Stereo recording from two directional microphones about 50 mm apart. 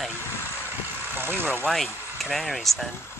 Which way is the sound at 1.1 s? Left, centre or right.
Right.